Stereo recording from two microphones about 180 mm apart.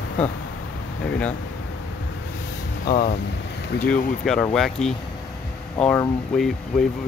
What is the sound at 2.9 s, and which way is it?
Speech, 55° left (ahead or behind).